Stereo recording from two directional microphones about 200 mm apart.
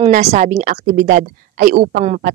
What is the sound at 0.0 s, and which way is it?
Speech, 35° right (ahead or behind).